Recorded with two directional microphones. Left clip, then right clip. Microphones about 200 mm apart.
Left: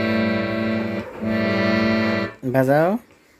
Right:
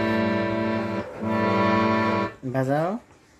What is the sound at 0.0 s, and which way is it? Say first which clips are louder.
Music: left 2 dB; 10° right (ahead or behind).